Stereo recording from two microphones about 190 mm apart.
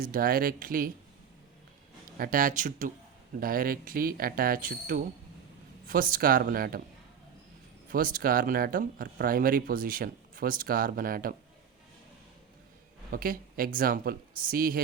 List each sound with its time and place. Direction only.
0.0 s speech: 50° right (ahead or behind)
2.1 s speech: 50° right (ahead or behind)
7.9 s speech: 50° right (ahead or behind)
13.1 s speech: 50° right (ahead or behind)